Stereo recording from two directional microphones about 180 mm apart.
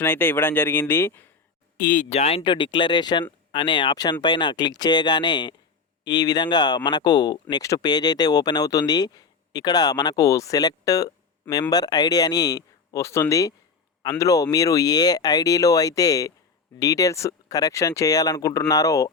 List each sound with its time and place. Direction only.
0.0 s speech: 10° left (ahead or behind)
1.8 s speech: 50° left (ahead or behind)
2.0 s speech: 35° left (ahead or behind); by 19.1 s 20° left (ahead or behind)